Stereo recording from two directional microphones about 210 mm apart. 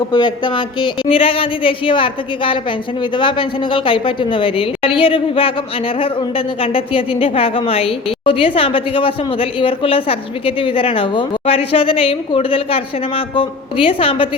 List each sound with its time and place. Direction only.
0.1 s speech: 20° left (ahead or behind)